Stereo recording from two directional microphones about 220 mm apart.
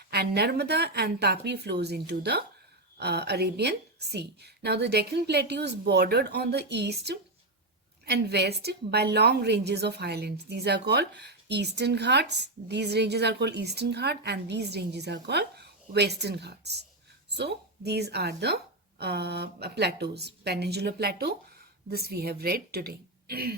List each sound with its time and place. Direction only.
0.1 s a woman's voice: 45° right (ahead or behind)